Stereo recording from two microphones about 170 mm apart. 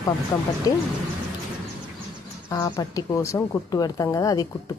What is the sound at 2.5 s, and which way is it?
Speech, 20° left (ahead or behind).